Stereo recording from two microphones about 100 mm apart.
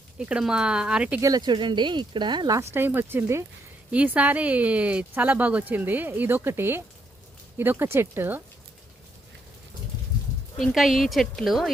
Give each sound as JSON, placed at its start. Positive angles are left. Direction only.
{"t": 0.2, "sound": "speech", "side_deg": -10}
{"t": 1.2, "sound": "speech", "side_deg": -40}
{"t": 2.6, "sound": "speech", "side_deg": -20}
{"t": 3.9, "sound": "speech", "side_deg": -15}
{"t": 10.6, "sound": "speech", "side_deg": 0}